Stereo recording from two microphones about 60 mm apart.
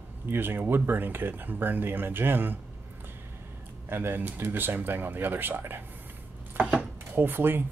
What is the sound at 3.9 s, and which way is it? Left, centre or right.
Speech, right.